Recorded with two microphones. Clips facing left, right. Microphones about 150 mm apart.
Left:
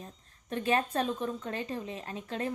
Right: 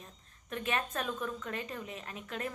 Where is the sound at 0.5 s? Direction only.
30° left (ahead or behind).